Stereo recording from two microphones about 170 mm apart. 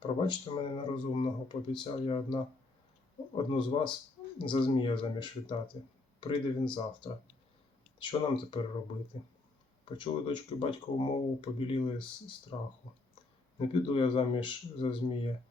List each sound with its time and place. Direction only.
0.2 s speech: 30° left (ahead or behind)
9.8 s speech: 30° left (ahead or behind)